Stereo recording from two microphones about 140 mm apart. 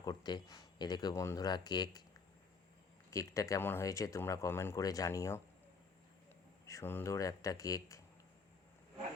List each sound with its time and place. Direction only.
0.0 s speech: 30° left (ahead or behind)
3.1 s speech: 20° left (ahead or behind)
6.7 s speech: 20° left (ahead or behind)